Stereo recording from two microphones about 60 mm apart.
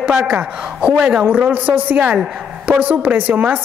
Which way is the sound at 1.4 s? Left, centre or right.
Right.